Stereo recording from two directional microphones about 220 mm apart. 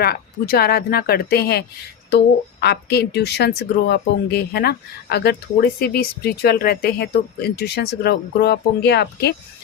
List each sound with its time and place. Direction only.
0.0 s speech: 45° left (ahead or behind)